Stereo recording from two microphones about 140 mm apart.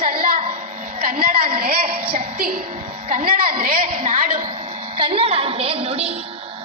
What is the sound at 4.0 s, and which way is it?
Speech, 75° right (ahead or behind).